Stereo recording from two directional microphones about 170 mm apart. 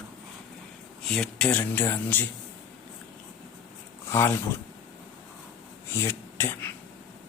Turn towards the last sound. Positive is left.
turn(degrees=15)  # may be behind; listen again after turning